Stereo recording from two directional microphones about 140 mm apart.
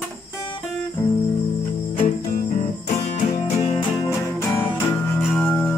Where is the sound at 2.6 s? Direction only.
45° left (ahead or behind).